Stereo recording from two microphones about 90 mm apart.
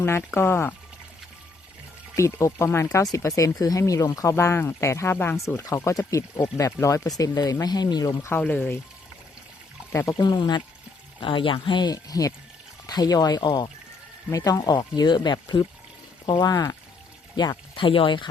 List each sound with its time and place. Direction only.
0.0 s speech: 25° left (ahead or behind)
2.1 s speech: 35° left (ahead or behind)
5.1 s speech: 20° left (ahead or behind)
5.7 s speech: 30° left (ahead or behind); by 8.1 s 50° left (ahead or behind)
8.4 s speech: 20° left (ahead or behind)
9.9 s speech: 30° left (ahead or behind)
10.2 s speech: 55° left (ahead or behind)
11.2 s speech: 70° left (ahead or behind); by 13.7 s 50° left (ahead or behind)
14.3 s speech: 40° left (ahead or behind)
17.3 s speech: 55° left (ahead or behind)